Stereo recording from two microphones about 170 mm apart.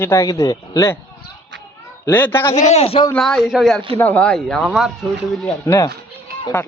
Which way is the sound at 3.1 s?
5° left (ahead or behind).